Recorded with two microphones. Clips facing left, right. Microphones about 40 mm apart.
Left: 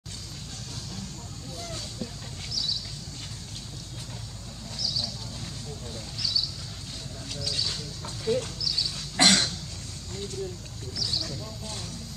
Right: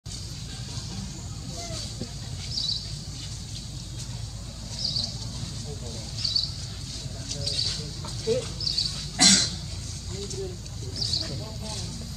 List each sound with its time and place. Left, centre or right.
2.5 s vehicle: centre
4.7 s a sound: centre
6.1 s a sound: centre
7.3 s goat: centre
8.5 s dog: centre
9.1 s cough: centre
11.1 s vehicle: centre